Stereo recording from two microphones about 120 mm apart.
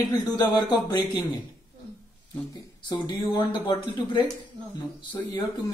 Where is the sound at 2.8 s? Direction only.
40° left (ahead or behind).